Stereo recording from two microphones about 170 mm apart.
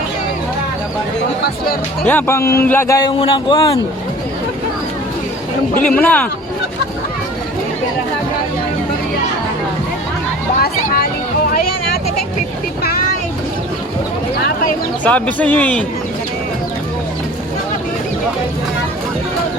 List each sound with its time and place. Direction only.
2.0 s a man's voice: 10° left (ahead or behind); by 3.8 s 30° left (ahead or behind)
5.7 s speech: 55° left (ahead or behind)
6.0 s a man's voice: 10° left (ahead or behind)
10.6 s vehicle: 60° left (ahead or behind)
15.0 s a man's voice: 10° left (ahead or behind)